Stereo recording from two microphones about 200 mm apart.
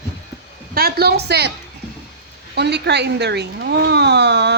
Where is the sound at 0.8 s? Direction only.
50° right (ahead or behind).